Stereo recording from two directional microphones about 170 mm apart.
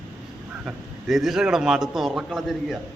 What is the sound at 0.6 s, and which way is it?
A man's voice, centre (ahead or behind).